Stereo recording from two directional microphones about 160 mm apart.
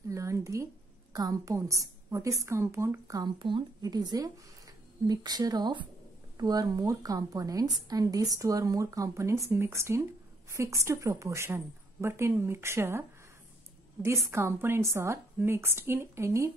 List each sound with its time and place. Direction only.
0.1 s a sound: 20° right (ahead or behind)
1.1 s a woman's voice: 20° right (ahead or behind)
14.3 s a woman's voice: 15° right (ahead or behind)